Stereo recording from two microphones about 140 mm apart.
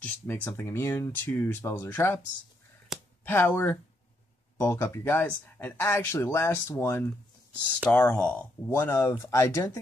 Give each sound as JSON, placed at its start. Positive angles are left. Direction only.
{"t": 0.0, "sound": "speech", "side_deg": 15}
{"t": 2.9, "sound": "a sound", "side_deg": -5}
{"t": 3.3, "sound": "speech", "side_deg": 15}